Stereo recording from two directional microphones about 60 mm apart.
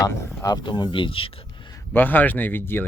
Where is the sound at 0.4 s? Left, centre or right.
Left.